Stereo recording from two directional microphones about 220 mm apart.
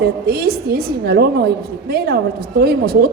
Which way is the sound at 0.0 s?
45° right (ahead or behind).